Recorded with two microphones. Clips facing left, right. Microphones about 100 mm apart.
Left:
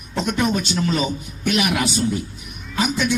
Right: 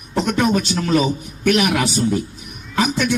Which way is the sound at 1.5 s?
50° right (ahead or behind).